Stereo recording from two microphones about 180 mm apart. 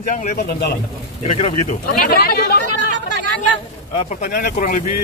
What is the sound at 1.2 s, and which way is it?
Speech, 40° left (ahead or behind).